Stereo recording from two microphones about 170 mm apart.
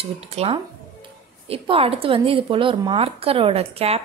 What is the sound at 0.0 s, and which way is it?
A woman's voice, 35° right (ahead or behind).